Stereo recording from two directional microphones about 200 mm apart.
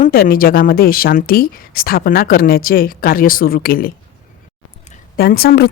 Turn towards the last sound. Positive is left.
turn(degrees=50)  # may be behind; listen again after turning